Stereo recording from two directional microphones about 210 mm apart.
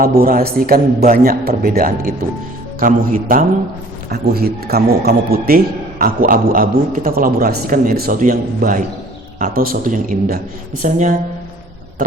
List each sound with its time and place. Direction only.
0.0 s a man's voice: 45° right (ahead or behind)